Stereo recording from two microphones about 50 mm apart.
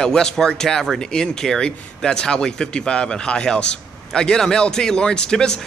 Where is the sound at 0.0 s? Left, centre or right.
Centre.